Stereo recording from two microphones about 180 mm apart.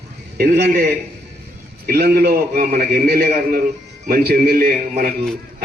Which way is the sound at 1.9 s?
55° right (ahead or behind).